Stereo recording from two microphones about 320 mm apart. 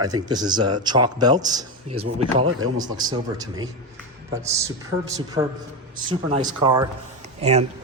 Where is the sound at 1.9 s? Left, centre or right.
Right.